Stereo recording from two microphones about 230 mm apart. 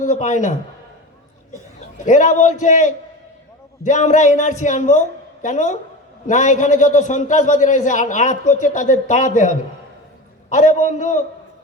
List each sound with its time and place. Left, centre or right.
0.0 s a man's voice: left
2.0 s a man's voice: left